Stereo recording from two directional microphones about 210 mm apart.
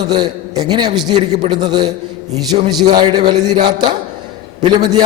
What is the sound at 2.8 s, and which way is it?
A man's voice, 20° right (ahead or behind).